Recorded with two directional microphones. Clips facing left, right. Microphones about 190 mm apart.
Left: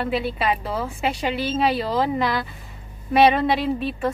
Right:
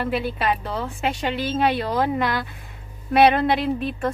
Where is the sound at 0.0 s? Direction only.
Centre (ahead or behind).